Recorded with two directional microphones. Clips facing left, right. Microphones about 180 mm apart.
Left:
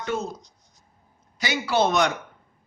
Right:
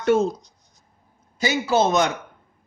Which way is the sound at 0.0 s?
70° right (ahead or behind).